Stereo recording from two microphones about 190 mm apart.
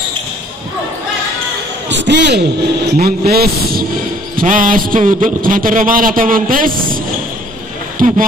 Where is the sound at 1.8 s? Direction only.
70° right (ahead or behind).